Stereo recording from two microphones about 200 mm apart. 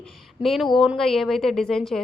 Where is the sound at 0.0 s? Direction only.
Centre (ahead or behind).